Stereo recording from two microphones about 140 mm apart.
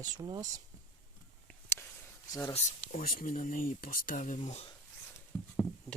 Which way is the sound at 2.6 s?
90° left.